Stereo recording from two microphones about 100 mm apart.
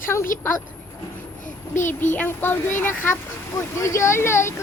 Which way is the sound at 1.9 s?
20° left (ahead or behind).